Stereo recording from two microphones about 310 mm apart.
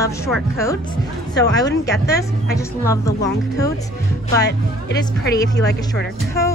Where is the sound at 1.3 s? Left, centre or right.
Centre.